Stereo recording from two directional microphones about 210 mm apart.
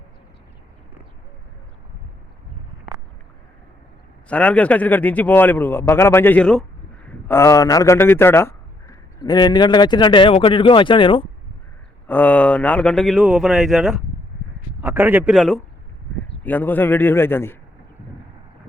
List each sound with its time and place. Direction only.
4.3 s speech: 5° left (ahead or behind); by 11.3 s 25° left (ahead or behind)
12.0 s a man's voice: 10° left (ahead or behind)